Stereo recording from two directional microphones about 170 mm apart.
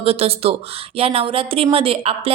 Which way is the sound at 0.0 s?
35° right (ahead or behind).